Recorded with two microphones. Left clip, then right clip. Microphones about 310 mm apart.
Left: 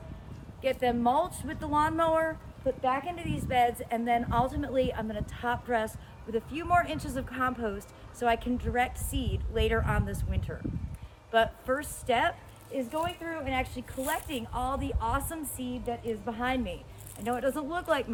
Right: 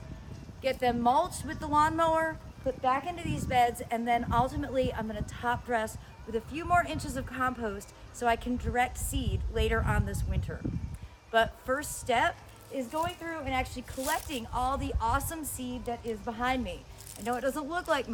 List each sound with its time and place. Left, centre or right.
0.6 s a woman's voice: centre